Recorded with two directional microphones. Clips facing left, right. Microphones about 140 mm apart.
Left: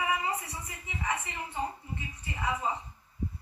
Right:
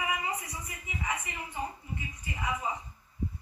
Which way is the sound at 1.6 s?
30° left (ahead or behind).